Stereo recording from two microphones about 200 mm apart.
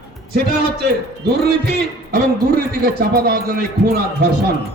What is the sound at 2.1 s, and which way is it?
A man's voice, 45° right (ahead or behind).